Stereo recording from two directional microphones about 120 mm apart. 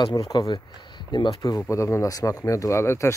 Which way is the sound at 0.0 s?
35° left (ahead or behind).